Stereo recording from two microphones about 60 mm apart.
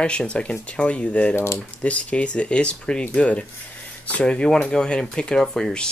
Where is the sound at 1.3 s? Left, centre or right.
Left.